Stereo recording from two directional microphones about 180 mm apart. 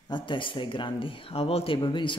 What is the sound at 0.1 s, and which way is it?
Speech, 25° left (ahead or behind).